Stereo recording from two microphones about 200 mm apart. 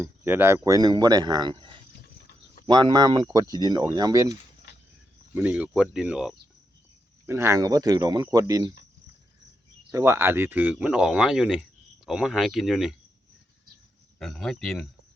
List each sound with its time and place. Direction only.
0.0 s speech: 10° right (ahead or behind)
9.9 s speech: 15° right (ahead or behind)
14.2 s speech: centre (ahead or behind)